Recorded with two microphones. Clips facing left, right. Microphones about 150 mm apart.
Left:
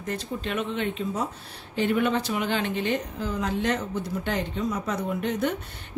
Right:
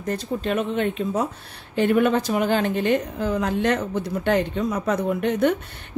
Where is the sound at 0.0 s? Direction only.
40° right (ahead or behind).